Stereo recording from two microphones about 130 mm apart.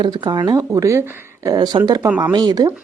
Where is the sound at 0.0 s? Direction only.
35° right (ahead or behind).